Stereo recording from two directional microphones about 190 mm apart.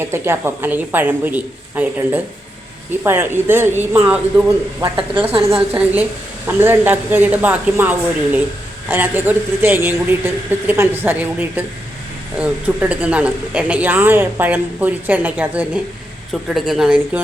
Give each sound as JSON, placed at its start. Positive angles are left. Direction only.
{"t": 0.0, "sound": "speech", "side_deg": -10}
{"t": 5.3, "sound": "a woman's voice", "side_deg": -30}
{"t": 5.5, "sound": "a woman's voice", "side_deg": -10}